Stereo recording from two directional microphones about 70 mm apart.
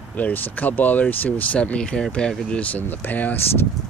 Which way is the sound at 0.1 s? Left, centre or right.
Left.